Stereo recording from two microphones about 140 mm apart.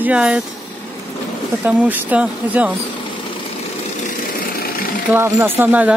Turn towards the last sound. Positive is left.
turn(degrees=-10)  # may be behind; listen again after turning